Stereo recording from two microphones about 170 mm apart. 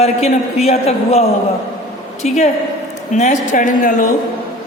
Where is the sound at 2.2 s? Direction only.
40° left (ahead or behind).